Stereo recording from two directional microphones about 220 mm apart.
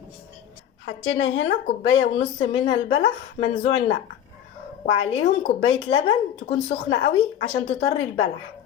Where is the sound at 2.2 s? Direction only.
25° left (ahead or behind).